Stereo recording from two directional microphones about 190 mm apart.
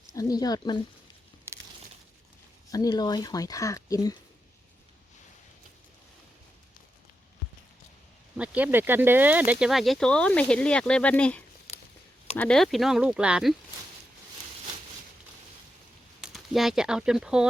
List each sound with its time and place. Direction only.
0.1 s speech: 20° left (ahead or behind)
2.7 s speech: 20° left (ahead or behind)
8.4 s speech: 10° right (ahead or behind)
16.2 s speech: centre (ahead or behind)